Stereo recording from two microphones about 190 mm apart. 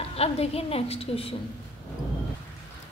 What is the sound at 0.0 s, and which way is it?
A woman's voice, 30° left (ahead or behind).